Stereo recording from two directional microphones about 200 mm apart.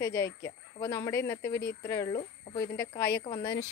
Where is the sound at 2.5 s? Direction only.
55° left (ahead or behind).